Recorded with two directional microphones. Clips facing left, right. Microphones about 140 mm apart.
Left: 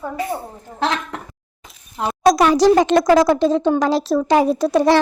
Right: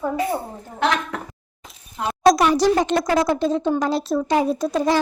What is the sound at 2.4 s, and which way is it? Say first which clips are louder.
Speech: left 4 dB; 90° left.